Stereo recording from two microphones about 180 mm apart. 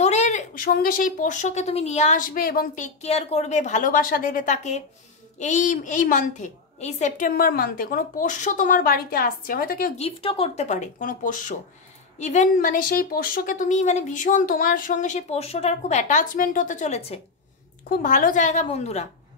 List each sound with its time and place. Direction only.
0.0 s speech: 40° left (ahead or behind)
9.9 s speech: 30° left (ahead or behind)